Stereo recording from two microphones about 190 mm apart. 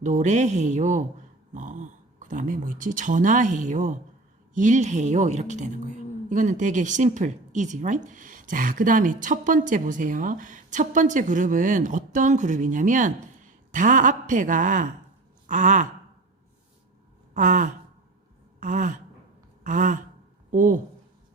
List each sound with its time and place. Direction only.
0.0 s a woman's voice: 40° right (ahead or behind)
15.4 s gasp: 40° right (ahead or behind)
17.3 s a woman's voice: 40° right (ahead or behind)
18.6 s a sound: 40° right (ahead or behind)